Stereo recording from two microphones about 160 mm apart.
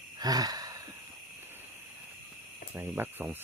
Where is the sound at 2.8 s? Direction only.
10° right (ahead or behind).